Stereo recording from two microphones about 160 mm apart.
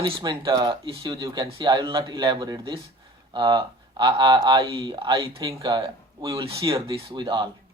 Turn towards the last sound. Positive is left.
turn(degrees=-25)  # may be behind; listen again after turning